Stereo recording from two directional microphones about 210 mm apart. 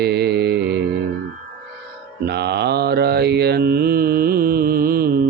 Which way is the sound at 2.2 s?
50° right (ahead or behind).